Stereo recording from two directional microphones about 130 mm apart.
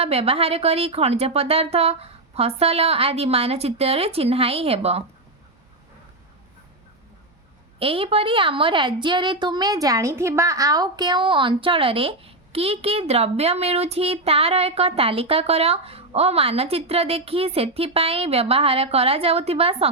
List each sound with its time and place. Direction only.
0.0 s a woman's voice: 50° right (ahead or behind)
7.8 s a woman's voice: 45° right (ahead or behind)